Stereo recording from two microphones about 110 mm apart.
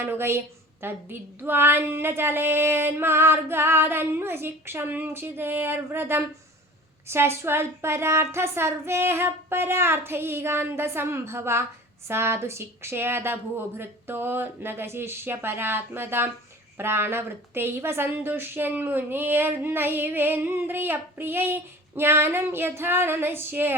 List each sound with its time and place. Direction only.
0.0 s a woman's voice: 20° right (ahead or behind)